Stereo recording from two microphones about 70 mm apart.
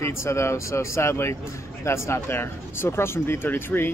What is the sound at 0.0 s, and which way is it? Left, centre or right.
Speech, left.